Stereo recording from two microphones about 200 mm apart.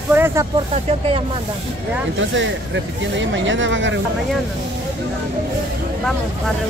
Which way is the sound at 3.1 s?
70° right (ahead or behind).